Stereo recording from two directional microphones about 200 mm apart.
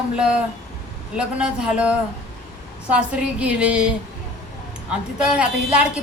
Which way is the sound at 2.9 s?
5° right (ahead or behind).